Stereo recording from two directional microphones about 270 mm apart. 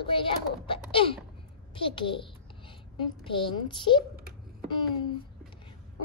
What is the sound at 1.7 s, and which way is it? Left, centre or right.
Speech, centre.